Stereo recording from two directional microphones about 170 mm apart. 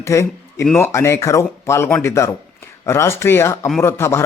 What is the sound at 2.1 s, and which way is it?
Speech, 15° left (ahead or behind).